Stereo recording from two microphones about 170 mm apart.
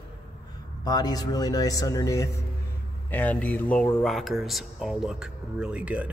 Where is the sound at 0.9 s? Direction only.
25° left (ahead or behind).